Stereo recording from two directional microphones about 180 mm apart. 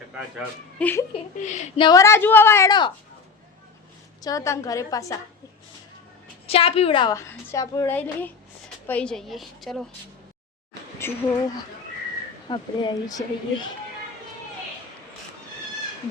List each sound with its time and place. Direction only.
0.8 s a woman's voice: 10° left (ahead or behind)
1.1 s speech: 40° left (ahead or behind)
1.8 s a woman's voice: 20° left (ahead or behind)
4.2 s a woman's voice: 20° left (ahead or behind)
6.5 s a woman's voice: 30° left (ahead or behind); by 9.8 s centre (ahead or behind)
11.0 s speech: 15° left (ahead or behind)
12.5 s a woman's voice: 25° left (ahead or behind)